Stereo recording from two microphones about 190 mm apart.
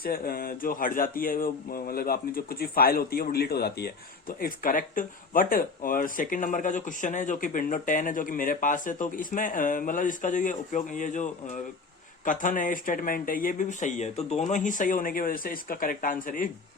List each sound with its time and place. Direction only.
0.0 s speech: 50° left (ahead or behind)